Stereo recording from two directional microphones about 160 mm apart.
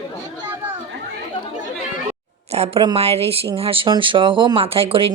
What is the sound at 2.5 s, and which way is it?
Speech, 40° right (ahead or behind).